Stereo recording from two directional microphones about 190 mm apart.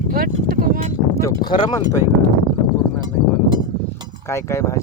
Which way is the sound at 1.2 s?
20° left (ahead or behind).